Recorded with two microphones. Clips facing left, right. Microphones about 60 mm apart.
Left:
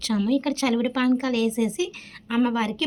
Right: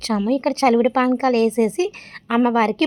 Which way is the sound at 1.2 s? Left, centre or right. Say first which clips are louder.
Right 7 dB; right.